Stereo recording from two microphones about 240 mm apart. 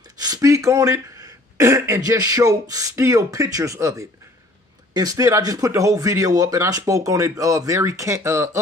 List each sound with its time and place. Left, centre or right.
0.2 s speech: centre